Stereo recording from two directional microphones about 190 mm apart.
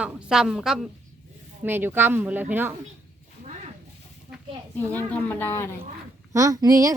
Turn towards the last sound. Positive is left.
turn(degrees=-20)  # may be behind; listen again after turning